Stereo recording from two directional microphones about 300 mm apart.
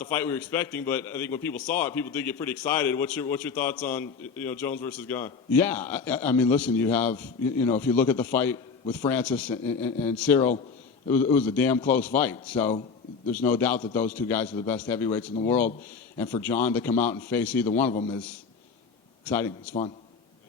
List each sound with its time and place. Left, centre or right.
0.0 s a man's voice: centre
17.9 s a man's voice: left
19.2 s a man's voice: centre